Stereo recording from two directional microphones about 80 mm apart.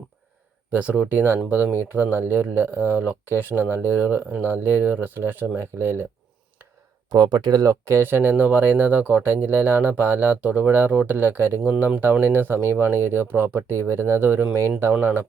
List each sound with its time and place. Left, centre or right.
0.7 s speech: right
7.1 s speech: right